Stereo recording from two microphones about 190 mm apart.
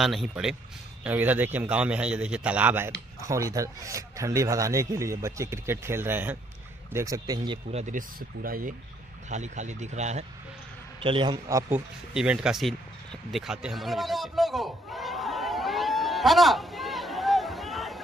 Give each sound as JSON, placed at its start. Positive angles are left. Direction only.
{"t": 0.0, "sound": "a man's voice", "side_deg": 0}
{"t": 7.8, "sound": "speech", "side_deg": -45}
{"t": 11.4, "sound": "a man's voice", "side_deg": -15}
{"t": 12.1, "sound": "a sound", "side_deg": -5}